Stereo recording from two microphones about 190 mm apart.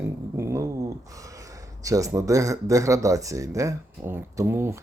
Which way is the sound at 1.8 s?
15° right (ahead or behind).